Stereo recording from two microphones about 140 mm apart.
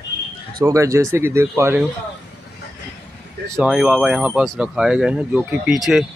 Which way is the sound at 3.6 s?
5° right (ahead or behind).